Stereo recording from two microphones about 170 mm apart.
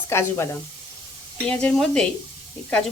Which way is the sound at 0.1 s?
15° left (ahead or behind).